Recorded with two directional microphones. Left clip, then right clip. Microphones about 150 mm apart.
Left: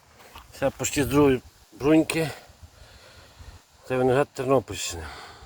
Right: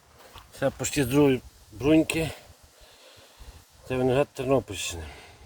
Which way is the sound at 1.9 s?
35° left (ahead or behind).